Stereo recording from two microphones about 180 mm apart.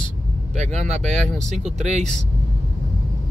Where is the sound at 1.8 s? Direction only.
40° right (ahead or behind).